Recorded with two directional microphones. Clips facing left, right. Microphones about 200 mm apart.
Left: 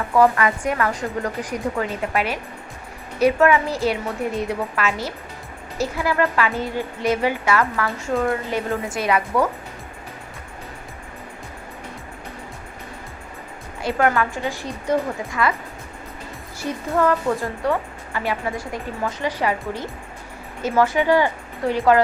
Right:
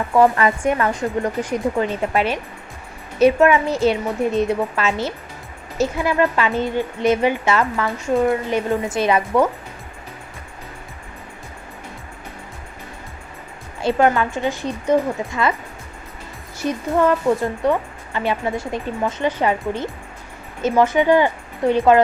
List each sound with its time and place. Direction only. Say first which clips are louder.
0.2 s speech: right 2 dB; 25° right (ahead or behind)
13.8 s speech: right 3 dB; 25° right (ahead or behind)
16.6 s speech: right 3 dB; 20° right (ahead or behind)